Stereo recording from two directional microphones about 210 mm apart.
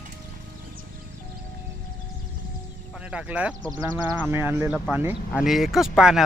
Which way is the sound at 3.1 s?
5° right (ahead or behind).